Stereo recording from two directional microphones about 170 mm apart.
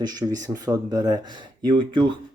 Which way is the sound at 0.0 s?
25° right (ahead or behind).